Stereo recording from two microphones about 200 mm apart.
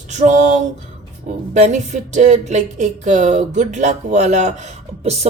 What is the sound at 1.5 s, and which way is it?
Speech, 35° right (ahead or behind).